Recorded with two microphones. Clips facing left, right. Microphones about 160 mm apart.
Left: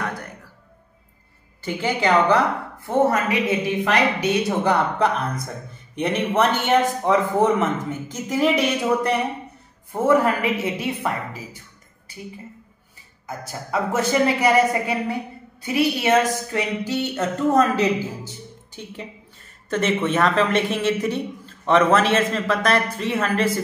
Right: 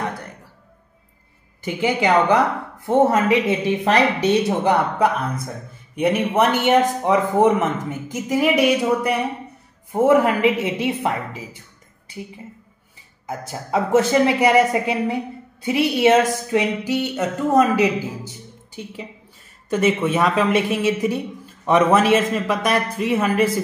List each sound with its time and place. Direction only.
1.6 s a woman's voice: 15° right (ahead or behind)
3.8 s a woman's voice: 35° right (ahead or behind)
4.6 s speech: 10° right (ahead or behind)
10.0 s a woman's voice: 20° right (ahead or behind)
13.5 s a woman's voice: 20° right (ahead or behind)
19.7 s speech: 10° right (ahead or behind)